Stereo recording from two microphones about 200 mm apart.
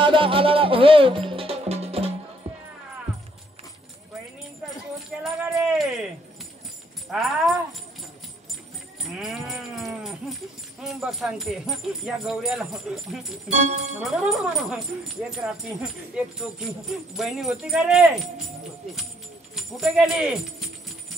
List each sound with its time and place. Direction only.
0.0 s music: 25° right (ahead or behind)
4.9 s a sound: centre (ahead or behind)
7.1 s a sound: centre (ahead or behind)
9.0 s speech: centre (ahead or behind)
13.5 s speech: 35° right (ahead or behind)
13.9 s speech: centre (ahead or behind)
19.5 s speech: centre (ahead or behind)